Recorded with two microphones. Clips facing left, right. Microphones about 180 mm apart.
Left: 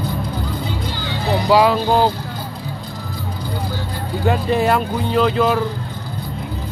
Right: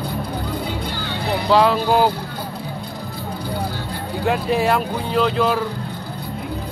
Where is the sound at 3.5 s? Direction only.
60° right (ahead or behind).